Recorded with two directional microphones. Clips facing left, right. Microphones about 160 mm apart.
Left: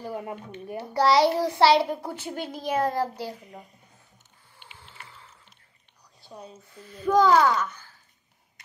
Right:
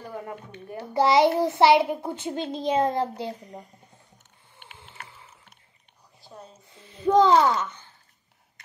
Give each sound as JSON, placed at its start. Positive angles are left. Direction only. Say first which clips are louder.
{"t": 0.1, "sound": "speech", "louder": "left 2 dB", "side_deg": 20}
{"t": 0.9, "sound": "a child's voice", "louder": "right 1 dB", "side_deg": -20}
{"t": 4.6, "sound": "a sound", "louder": "right 3 dB", "side_deg": -55}
{"t": 6.7, "sound": "a child's voice", "louder": "right 2 dB", "side_deg": -25}